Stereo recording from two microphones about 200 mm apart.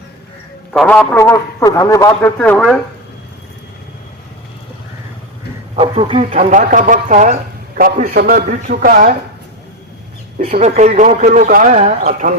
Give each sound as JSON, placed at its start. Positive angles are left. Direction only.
{"t": 0.7, "sound": "a man's voice", "side_deg": 5}
{"t": 1.1, "sound": "speech", "side_deg": 15}
{"t": 5.7, "sound": "a man's voice", "side_deg": -30}
{"t": 10.3, "sound": "a man's voice", "side_deg": -40}